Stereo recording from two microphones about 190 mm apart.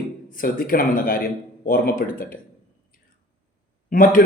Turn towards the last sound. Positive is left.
turn(degrees=45)  # may be behind; listen again after turning